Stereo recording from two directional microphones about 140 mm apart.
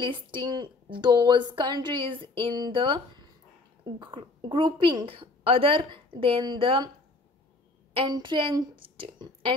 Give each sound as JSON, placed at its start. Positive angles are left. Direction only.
{"t": 0.0, "sound": "a woman's voice", "side_deg": -35}
{"t": 4.0, "sound": "a woman's voice", "side_deg": -35}
{"t": 7.9, "sound": "a woman's voice", "side_deg": -35}